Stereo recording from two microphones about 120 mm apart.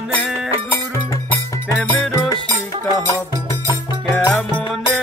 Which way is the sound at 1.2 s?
20° left (ahead or behind).